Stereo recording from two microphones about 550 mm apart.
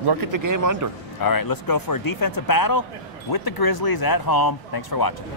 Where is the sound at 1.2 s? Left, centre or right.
Left.